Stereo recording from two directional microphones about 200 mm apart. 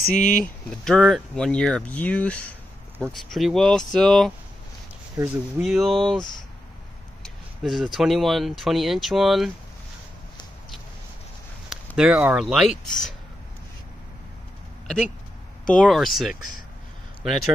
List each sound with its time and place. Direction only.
0.0 s speech: 45° left (ahead or behind)
0.7 s speech: centre (ahead or behind)
7.2 s speech: centre (ahead or behind)
11.7 s speech: 5° right (ahead or behind)
15.7 s speech: 5° left (ahead or behind)